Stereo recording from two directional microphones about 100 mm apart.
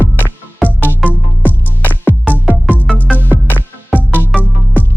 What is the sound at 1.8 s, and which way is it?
Music, 15° left (ahead or behind).